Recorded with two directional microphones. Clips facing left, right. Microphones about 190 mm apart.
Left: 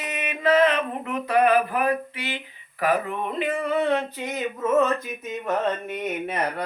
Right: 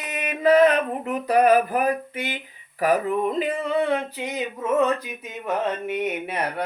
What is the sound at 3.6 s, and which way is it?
Mantra, 15° right (ahead or behind).